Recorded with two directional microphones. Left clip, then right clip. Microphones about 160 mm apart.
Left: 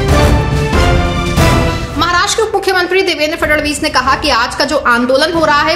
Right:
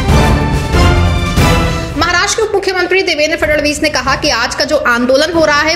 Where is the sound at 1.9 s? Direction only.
10° right (ahead or behind).